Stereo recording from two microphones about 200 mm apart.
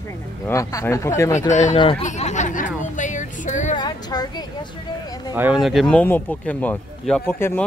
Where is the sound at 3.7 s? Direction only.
20° left (ahead or behind).